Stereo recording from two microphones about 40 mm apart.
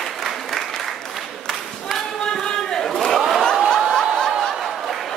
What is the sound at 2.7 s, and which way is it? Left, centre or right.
Crowd, centre.